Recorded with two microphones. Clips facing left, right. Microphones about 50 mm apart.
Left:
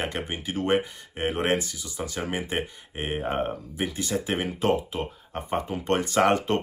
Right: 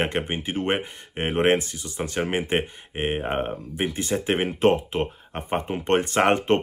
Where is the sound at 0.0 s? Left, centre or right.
Right.